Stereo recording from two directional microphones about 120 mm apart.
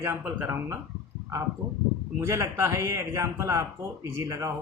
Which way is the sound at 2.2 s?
20° right (ahead or behind).